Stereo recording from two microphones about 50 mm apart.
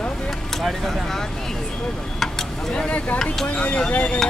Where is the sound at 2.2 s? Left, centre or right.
Centre.